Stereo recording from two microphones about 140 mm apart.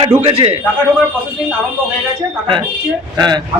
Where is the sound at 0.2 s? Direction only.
45° right (ahead or behind).